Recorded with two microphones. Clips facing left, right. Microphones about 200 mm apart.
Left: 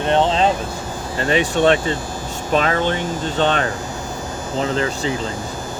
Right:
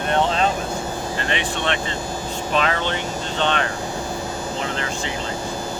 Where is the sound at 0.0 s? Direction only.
25° left (ahead or behind).